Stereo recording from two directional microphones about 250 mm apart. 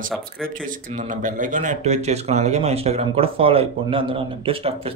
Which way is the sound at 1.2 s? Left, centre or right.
Right.